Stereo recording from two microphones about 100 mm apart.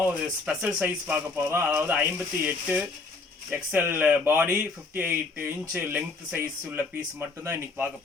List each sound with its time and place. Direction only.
0.0 s speech: 10° right (ahead or behind)